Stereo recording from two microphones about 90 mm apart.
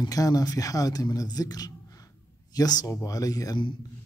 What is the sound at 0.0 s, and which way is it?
A man's voice, 45° left (ahead or behind).